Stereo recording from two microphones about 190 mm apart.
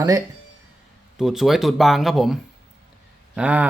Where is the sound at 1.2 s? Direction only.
Centre (ahead or behind).